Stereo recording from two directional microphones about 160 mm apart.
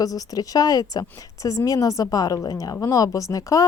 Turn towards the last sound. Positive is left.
turn(degrees=20)  # may be behind; listen again after turning